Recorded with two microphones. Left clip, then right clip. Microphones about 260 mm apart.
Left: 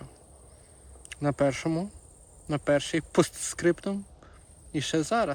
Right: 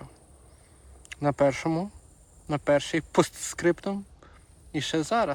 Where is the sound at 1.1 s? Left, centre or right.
Centre.